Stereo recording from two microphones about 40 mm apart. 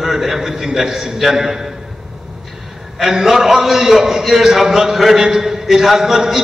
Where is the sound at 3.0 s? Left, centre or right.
Centre.